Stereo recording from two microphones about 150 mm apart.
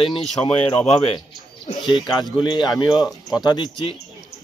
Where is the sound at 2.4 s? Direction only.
30° left (ahead or behind).